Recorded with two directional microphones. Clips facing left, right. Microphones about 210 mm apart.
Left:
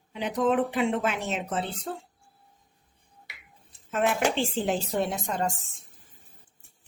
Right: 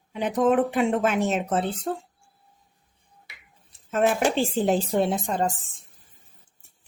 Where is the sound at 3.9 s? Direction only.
40° right (ahead or behind).